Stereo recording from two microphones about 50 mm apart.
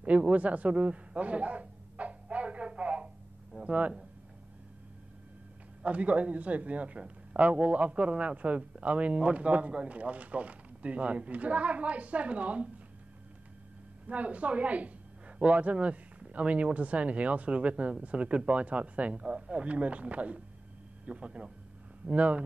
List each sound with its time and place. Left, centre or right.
0.3 s a sound: right
2.7 s telephone: right
3.5 s speech: right
5.8 s speech: right
14.0 s a woman's voice: right